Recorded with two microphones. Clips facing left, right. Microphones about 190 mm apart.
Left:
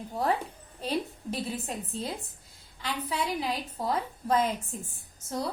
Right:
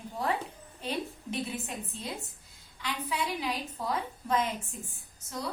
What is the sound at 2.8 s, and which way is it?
A woman's voice, 35° left (ahead or behind).